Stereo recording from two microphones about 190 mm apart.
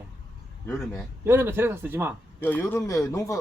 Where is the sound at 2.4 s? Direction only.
10° left (ahead or behind).